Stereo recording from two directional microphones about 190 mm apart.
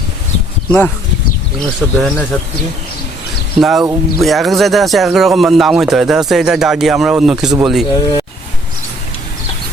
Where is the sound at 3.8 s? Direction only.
15° right (ahead or behind).